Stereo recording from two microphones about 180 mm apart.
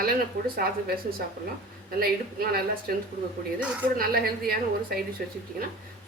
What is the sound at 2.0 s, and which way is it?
Speech, 60° right (ahead or behind).